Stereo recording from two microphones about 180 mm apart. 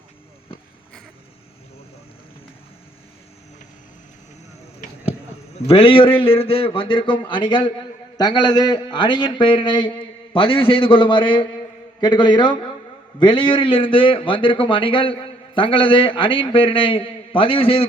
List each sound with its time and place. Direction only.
5.5 s a man's voice: 35° left (ahead or behind)